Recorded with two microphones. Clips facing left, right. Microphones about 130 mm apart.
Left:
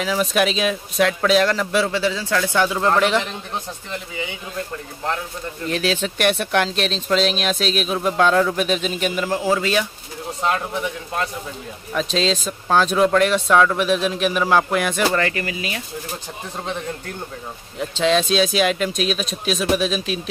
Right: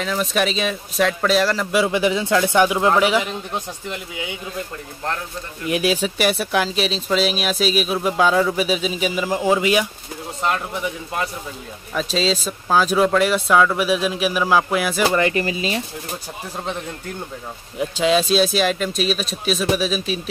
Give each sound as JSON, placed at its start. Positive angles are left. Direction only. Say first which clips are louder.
{"t": 0.0, "sound": "a man's voice", "louder": "left 2 dB", "side_deg": 0}
{"t": 5.7, "sound": "speech", "louder": "right 3 dB", "side_deg": -10}
{"t": 10.4, "sound": "speech", "louder": "left 1 dB", "side_deg": 0}
{"t": 15.1, "sound": "speech", "louder": "right 3 dB", "side_deg": -20}
{"t": 17.7, "sound": "speech", "louder": "right 1 dB", "side_deg": -5}